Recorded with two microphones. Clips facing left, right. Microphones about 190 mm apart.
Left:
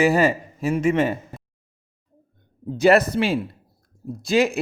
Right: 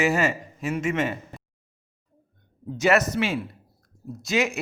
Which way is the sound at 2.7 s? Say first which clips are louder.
Left 5 dB; 35° left (ahead or behind).